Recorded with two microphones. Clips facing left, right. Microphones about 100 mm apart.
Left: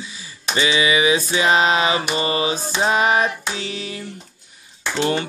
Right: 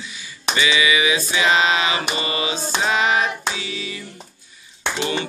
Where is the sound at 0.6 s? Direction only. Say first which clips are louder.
Left 1 dB; 35° left (ahead or behind); by 4.0 s 50° left (ahead or behind).